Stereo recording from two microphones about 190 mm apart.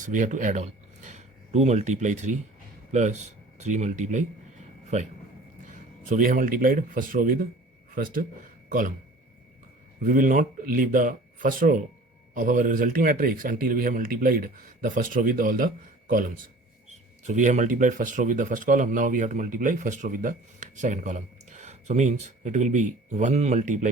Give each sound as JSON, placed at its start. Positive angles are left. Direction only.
{"t": 0.0, "sound": "speech", "side_deg": -40}
{"t": 5.6, "sound": "a man's voice", "side_deg": -45}
{"t": 10.0, "sound": "a man's voice", "side_deg": -45}